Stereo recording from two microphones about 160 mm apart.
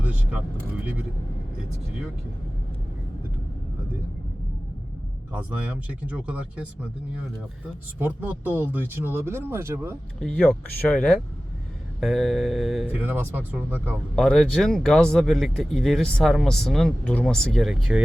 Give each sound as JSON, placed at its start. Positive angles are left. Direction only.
{"t": 0.0, "sound": "speech", "side_deg": -10}
{"t": 5.9, "sound": "speech", "side_deg": -10}
{"t": 7.9, "sound": "speech", "side_deg": -10}
{"t": 10.2, "sound": "speech", "side_deg": 5}
{"t": 14.2, "sound": "speech", "side_deg": 0}